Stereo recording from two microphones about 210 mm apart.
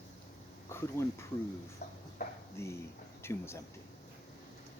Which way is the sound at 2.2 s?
45° left (ahead or behind).